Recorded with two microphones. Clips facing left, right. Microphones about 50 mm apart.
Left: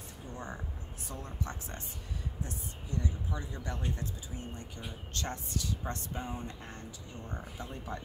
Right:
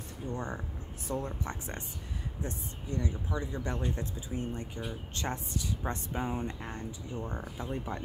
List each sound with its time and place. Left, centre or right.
0.3 s speech: right